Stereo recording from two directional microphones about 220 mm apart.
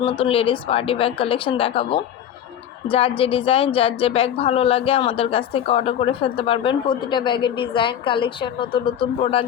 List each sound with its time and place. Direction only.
0.0 s a woman's voice: 25° left (ahead or behind)